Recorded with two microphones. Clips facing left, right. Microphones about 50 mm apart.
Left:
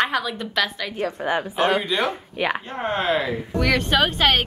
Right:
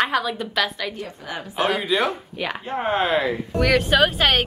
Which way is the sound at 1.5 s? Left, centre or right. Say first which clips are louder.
Right 2 dB; centre.